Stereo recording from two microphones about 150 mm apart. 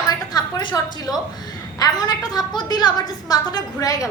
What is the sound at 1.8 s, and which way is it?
A woman's voice, 25° left (ahead or behind).